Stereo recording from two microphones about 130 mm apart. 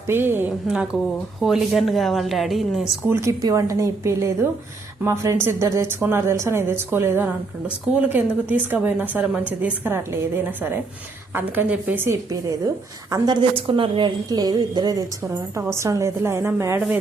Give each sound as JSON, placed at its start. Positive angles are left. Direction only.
{"t": 0.1, "sound": "a woman's voice", "side_deg": -15}
{"t": 0.7, "sound": "a woman's voice", "side_deg": 0}
{"t": 3.1, "sound": "a woman's voice", "side_deg": -20}
{"t": 12.3, "sound": "a woman's voice", "side_deg": -30}
{"t": 13.6, "sound": "a woman's voice", "side_deg": -45}
{"t": 14.3, "sound": "speech", "side_deg": -30}